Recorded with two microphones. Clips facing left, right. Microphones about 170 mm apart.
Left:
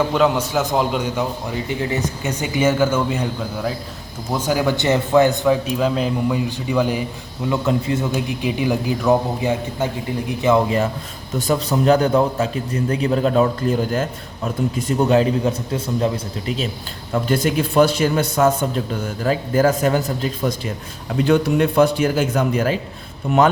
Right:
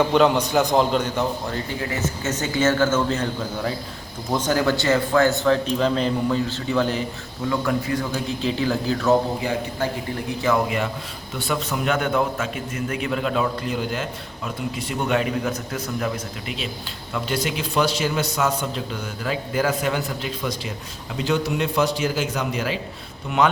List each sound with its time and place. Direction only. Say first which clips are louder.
0.1 s a man's voice: even; 5° left (ahead or behind)
7.5 s a man's voice: left 3 dB; 20° left (ahead or behind)
11.3 s a man's voice: left 6 dB; 40° left (ahead or behind)
17.1 s speech: left 6 dB; 50° left (ahead or behind)
21.2 s speech: left 6 dB; 55° left (ahead or behind)